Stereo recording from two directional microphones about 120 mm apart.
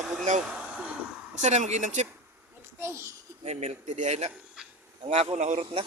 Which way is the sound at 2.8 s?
20° right (ahead or behind).